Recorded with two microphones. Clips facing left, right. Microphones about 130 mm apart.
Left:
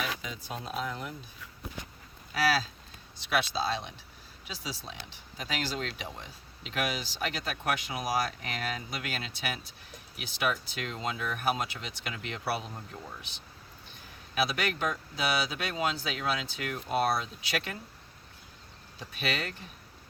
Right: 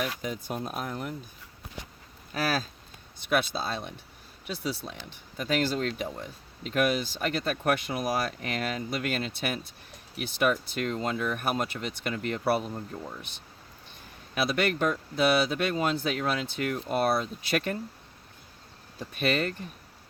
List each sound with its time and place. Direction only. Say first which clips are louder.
0.2 s speech: right 6 dB; 50° right (ahead or behind)
2.3 s speech: left 1 dB; 50° right (ahead or behind)
14.5 s speech: right 5 dB; 50° right (ahead or behind)
18.9 s speech: right 7 dB; 50° right (ahead or behind)